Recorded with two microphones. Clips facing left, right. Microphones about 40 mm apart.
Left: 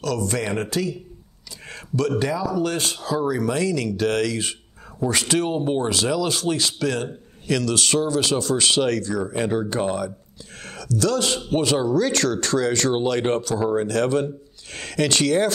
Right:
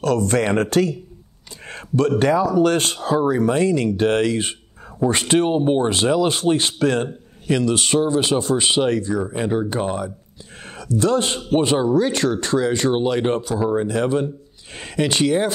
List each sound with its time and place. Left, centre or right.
0.0 s speech: right
1.7 s speech: right
3.0 s speech: right; by 15.5 s centre